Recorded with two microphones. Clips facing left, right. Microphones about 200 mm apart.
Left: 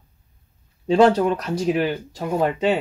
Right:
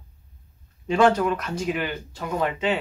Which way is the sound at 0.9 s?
30° left (ahead or behind).